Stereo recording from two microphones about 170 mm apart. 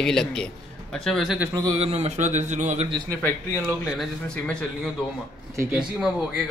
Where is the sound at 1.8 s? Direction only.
40° right (ahead or behind).